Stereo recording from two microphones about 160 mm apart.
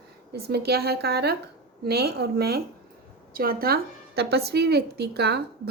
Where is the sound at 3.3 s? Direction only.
65° right (ahead or behind).